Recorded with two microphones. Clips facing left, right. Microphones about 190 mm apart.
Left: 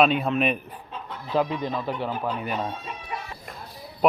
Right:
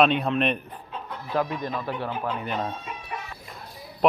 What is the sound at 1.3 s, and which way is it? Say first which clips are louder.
Speech: left 2 dB; 15° left (ahead or behind).